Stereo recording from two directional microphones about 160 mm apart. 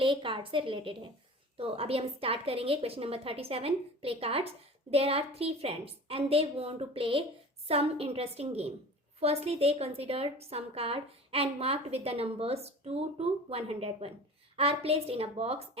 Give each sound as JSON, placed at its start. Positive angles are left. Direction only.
{"t": 0.0, "sound": "a woman's voice", "side_deg": -30}